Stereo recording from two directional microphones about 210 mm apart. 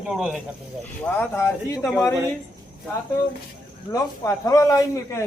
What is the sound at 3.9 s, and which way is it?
A man's voice, 15° left (ahead or behind).